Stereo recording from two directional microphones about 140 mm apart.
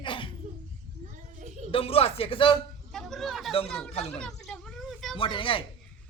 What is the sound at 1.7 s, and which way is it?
Speech, 45° left (ahead or behind).